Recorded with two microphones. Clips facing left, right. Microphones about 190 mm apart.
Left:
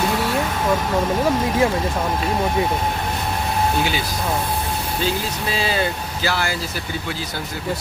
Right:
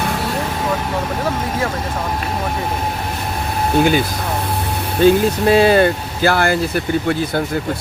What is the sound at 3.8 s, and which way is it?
Speech, 50° right (ahead or behind).